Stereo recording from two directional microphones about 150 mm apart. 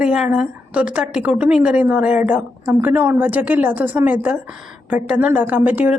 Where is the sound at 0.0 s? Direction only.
5° right (ahead or behind).